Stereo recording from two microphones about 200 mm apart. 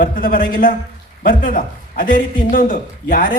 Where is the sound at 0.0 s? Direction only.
45° left (ahead or behind).